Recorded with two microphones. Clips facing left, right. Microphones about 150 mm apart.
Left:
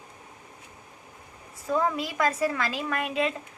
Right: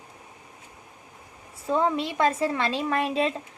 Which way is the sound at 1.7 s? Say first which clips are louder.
Right 2 dB; 25° right (ahead or behind).